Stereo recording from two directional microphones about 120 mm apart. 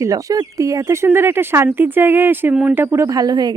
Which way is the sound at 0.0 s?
30° right (ahead or behind).